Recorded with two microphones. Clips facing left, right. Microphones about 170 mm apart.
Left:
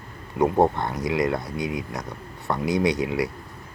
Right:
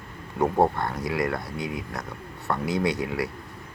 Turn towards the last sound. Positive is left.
turn(degrees=15)  # may be behind; listen again after turning